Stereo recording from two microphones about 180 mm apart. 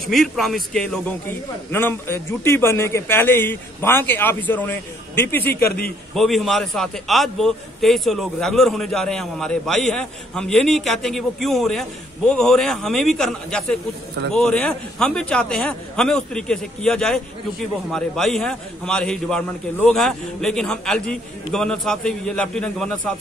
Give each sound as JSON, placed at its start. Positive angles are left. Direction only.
{"t": 0.0, "sound": "a man's voice", "side_deg": 0}
{"t": 5.4, "sound": "a man's voice", "side_deg": 60}
{"t": 6.1, "sound": "a man's voice", "side_deg": 0}